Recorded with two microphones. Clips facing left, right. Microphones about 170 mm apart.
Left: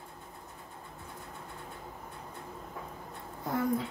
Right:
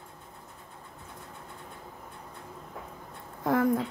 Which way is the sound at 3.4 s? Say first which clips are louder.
Right 5 dB; 90° right.